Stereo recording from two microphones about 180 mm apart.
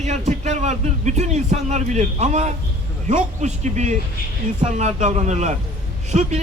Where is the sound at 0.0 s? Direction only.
40° right (ahead or behind).